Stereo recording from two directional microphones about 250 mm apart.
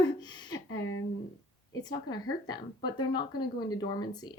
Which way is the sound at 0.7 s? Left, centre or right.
Left.